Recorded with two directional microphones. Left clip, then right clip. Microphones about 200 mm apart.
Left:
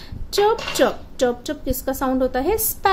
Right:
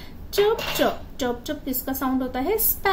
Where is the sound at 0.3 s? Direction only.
50° left (ahead or behind).